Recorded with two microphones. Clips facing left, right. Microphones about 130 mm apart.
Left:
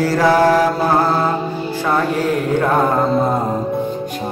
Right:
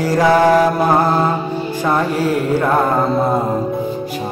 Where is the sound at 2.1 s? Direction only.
10° right (ahead or behind).